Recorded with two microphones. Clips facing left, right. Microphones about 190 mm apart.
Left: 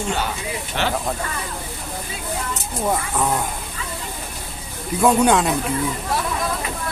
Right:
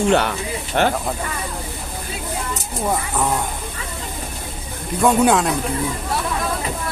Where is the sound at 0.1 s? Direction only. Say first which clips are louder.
Right 7 dB; 65° right (ahead or behind).